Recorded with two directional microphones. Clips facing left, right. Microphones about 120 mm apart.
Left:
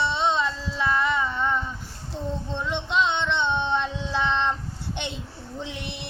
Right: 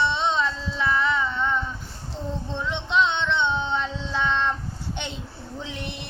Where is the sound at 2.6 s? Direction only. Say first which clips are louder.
Right 1 dB; 10° left (ahead or behind).